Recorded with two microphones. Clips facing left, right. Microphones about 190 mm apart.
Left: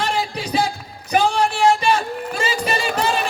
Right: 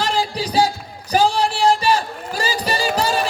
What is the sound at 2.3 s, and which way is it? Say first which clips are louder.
Music: right 1 dB; 35° right (ahead or behind).